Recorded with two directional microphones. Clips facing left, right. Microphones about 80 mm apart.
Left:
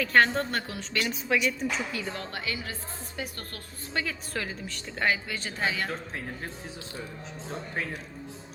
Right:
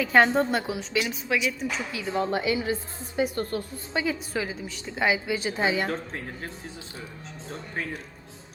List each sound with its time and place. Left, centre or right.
0.0 s a woman's voice: centre
2.0 s a woman's voice: centre
5.9 s a woman's voice: centre